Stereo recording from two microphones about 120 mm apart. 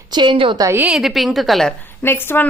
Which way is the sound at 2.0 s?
20° left (ahead or behind).